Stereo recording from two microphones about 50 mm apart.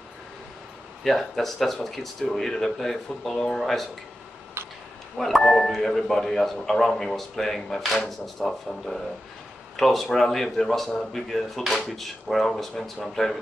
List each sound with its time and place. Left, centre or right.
1.0 s speech: centre
4.6 s a sound: right
5.1 s speech: centre